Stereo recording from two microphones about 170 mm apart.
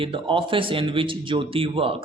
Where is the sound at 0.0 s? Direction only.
30° right (ahead or behind).